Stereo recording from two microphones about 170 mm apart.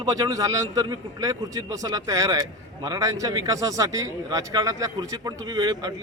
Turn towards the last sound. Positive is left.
turn(degrees=-25)  # may be behind; listen again after turning